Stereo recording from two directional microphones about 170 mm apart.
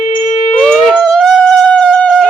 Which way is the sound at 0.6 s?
5° left (ahead or behind).